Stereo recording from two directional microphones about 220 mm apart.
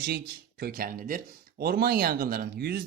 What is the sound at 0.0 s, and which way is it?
Speech, 45° right (ahead or behind).